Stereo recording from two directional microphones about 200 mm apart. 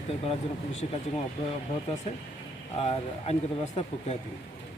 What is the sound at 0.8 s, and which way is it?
Speech, 35° left (ahead or behind).